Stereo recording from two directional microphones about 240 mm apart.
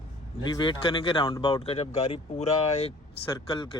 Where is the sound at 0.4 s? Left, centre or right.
Centre.